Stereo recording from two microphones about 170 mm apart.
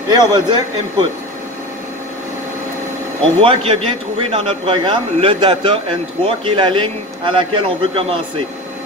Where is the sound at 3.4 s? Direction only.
30° right (ahead or behind).